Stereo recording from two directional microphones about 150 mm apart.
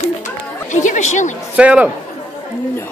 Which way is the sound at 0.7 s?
55° left (ahead or behind).